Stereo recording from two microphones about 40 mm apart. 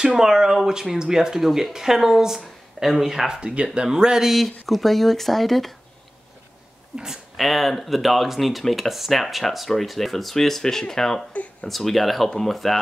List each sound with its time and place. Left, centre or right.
0.0 s speech: centre
4.3 s speech: centre
7.3 s speech: centre